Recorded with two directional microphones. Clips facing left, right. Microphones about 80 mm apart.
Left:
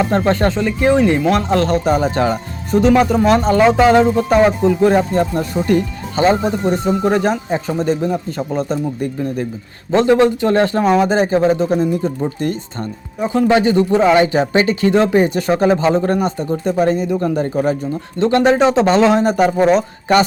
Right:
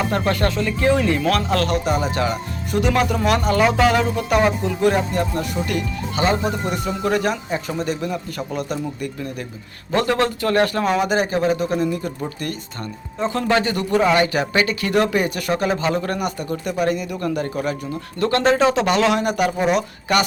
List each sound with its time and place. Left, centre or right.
0.0 s speech: left